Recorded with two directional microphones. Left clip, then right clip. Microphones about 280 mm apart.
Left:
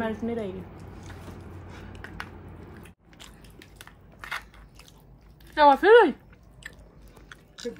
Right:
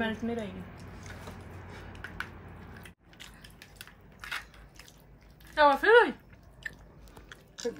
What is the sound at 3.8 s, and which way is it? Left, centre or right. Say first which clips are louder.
Crushing: left 2 dB; centre.